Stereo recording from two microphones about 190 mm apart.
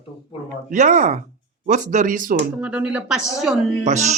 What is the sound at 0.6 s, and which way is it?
A man's voice, 40° right (ahead or behind).